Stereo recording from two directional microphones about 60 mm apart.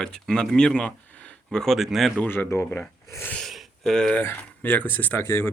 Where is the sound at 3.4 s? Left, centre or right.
Centre.